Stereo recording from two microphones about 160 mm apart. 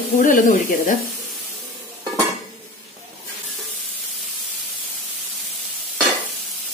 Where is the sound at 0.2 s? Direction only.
55° left (ahead or behind).